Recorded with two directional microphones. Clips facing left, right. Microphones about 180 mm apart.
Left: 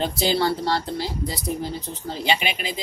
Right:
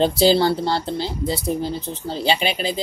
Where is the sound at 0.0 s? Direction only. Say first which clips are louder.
Right 6 dB; 30° right (ahead or behind).